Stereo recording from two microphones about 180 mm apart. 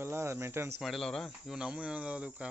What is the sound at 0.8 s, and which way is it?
Speech, centre (ahead or behind).